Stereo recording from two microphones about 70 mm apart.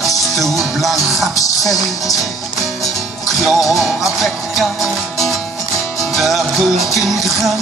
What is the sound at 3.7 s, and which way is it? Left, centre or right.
Music, centre.